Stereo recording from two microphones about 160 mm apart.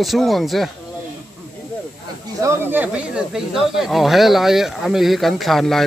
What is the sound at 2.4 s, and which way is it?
Speech, 15° right (ahead or behind).